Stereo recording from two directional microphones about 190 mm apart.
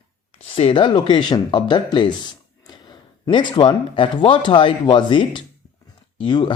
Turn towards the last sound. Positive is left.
turn(degrees=25)  # may be behind; listen again after turning